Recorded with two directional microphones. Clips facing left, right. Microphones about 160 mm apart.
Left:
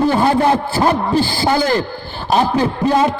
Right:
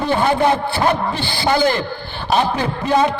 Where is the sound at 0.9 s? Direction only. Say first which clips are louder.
Left 4 dB; 40° left (ahead or behind).